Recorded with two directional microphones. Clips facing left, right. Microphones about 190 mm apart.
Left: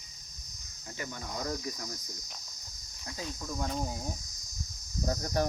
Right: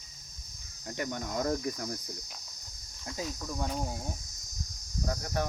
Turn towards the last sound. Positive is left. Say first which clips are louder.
# left 3 dB
turn(degrees=35)  # may be behind; listen again after turning